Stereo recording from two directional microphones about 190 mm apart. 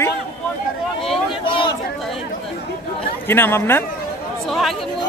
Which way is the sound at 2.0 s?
Centre (ahead or behind).